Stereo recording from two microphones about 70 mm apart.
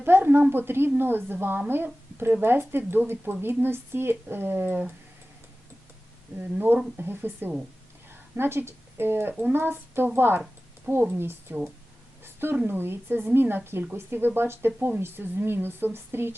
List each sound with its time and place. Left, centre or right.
0.0 s a woman's voice: right
6.9 s speech: right
12.2 s a sound: right
12.6 s speech: right